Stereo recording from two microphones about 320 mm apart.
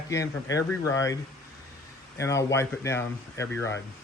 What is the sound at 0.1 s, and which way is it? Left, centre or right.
Speech, centre.